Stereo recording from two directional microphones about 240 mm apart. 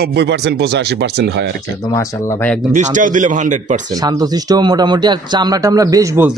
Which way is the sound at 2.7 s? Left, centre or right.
Right.